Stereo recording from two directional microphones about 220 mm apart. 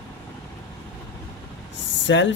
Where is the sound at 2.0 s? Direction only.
55° left (ahead or behind).